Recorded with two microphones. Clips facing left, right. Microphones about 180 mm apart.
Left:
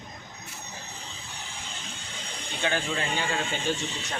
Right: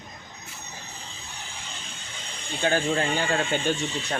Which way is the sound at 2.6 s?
45° right (ahead or behind).